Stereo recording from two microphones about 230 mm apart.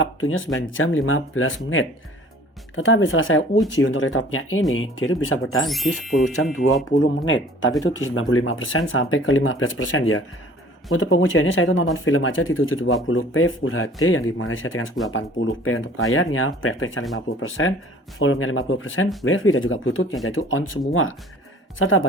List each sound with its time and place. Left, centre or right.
0.0 s speech: left
5.6 s speech: centre
6.9 s speech: left